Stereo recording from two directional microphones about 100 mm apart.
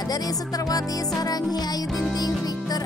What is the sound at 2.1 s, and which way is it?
Music, 40° left (ahead or behind).